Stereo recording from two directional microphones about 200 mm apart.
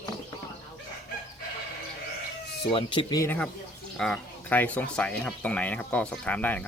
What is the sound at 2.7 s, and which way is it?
Speech, 25° left (ahead or behind).